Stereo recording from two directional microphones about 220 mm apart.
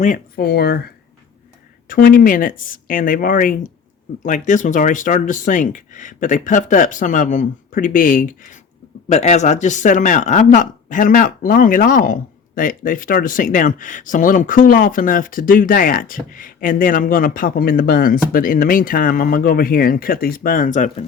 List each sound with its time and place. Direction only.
0.0 s speech: 40° left (ahead or behind)
1.9 s speech: 40° left (ahead or behind)